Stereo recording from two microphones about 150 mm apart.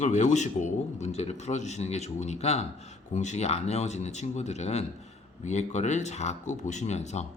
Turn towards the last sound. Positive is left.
turn(degrees=45)  # may be behind; listen again after turning